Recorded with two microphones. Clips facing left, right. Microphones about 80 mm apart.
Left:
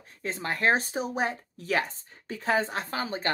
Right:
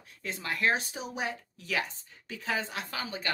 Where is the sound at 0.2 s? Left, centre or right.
Left.